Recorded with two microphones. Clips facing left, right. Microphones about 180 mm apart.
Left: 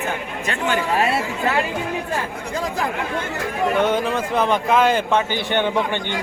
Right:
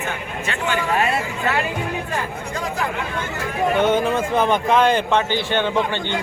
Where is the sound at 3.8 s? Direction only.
Centre (ahead or behind); by 5.7 s 15° left (ahead or behind).